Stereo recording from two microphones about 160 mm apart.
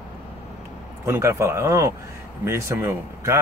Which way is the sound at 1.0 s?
15° right (ahead or behind).